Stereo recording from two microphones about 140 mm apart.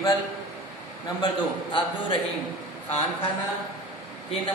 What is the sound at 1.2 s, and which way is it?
Speech, 35° left (ahead or behind).